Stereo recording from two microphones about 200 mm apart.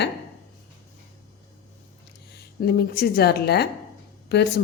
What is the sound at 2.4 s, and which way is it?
A woman's voice, 50° left (ahead or behind).